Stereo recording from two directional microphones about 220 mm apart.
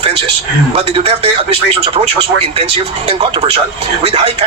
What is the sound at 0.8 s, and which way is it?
A man's voice, 25° right (ahead or behind).